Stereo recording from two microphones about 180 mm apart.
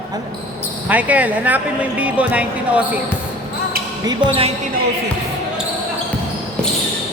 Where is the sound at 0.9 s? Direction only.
10° right (ahead or behind).